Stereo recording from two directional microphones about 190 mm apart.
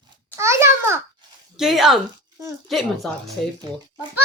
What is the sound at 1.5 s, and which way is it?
Speech, centre (ahead or behind).